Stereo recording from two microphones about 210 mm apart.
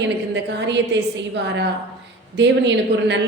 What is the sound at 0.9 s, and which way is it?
Speech, 55° right (ahead or behind).